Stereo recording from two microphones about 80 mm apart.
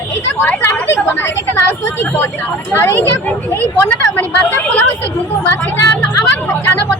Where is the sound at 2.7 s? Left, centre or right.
Left.